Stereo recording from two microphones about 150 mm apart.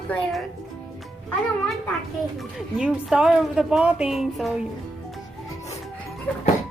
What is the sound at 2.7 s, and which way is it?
A woman's voice, 5° right (ahead or behind).